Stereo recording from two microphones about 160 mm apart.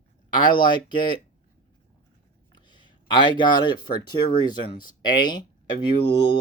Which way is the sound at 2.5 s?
30° left (ahead or behind).